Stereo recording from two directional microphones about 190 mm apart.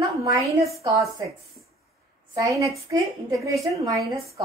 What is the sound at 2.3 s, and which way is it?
Speech, 15° right (ahead or behind).